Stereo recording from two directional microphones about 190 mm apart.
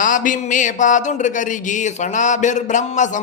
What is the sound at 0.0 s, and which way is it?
A man's voice, 45° left (ahead or behind).